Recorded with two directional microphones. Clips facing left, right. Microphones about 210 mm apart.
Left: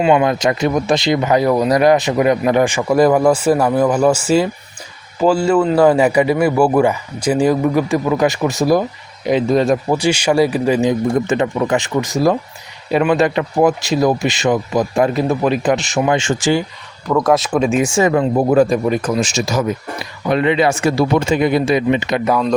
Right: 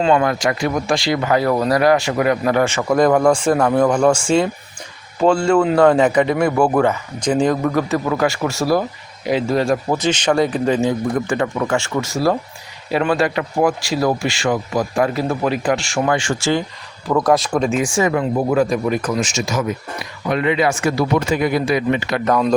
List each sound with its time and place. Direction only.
0.0 s a man's voice: 15° left (ahead or behind)
17.1 s speech: centre (ahead or behind)
17.8 s speech: 25° left (ahead or behind)